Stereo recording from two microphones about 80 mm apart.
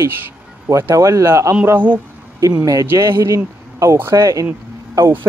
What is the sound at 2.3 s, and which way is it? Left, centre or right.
Speech, right.